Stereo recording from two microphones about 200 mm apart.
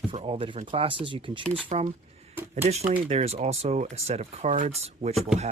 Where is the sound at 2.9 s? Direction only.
30° right (ahead or behind).